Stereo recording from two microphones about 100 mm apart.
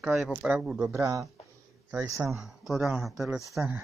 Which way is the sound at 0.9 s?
30° right (ahead or behind).